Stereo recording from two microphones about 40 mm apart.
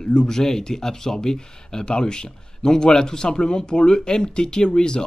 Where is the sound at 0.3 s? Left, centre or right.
Centre.